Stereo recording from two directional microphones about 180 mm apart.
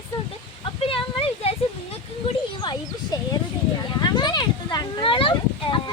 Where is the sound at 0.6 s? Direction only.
30° left (ahead or behind).